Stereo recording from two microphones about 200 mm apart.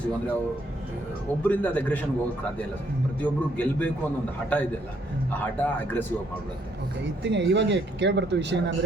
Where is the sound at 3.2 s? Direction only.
10° left (ahead or behind).